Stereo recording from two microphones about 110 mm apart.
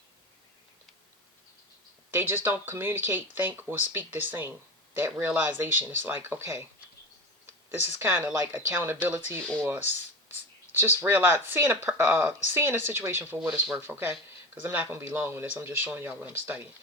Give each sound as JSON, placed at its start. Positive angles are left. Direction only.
{"t": 2.0, "sound": "speech", "side_deg": -20}
{"t": 7.7, "sound": "speech", "side_deg": -20}
{"t": 13.5, "sound": "speech", "side_deg": -5}
{"t": 13.8, "sound": "speech", "side_deg": -20}